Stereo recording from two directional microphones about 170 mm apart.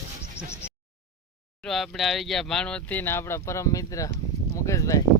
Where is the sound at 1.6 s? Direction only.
Centre (ahead or behind); by 5.0 s 20° left (ahead or behind).